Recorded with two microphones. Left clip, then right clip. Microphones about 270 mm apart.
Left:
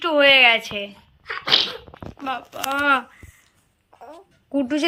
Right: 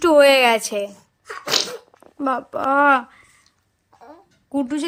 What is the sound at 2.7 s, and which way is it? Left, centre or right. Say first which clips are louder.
Speech: right 4 dB; centre.